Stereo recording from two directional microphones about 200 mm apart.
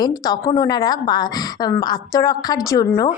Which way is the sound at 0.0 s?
20° left (ahead or behind).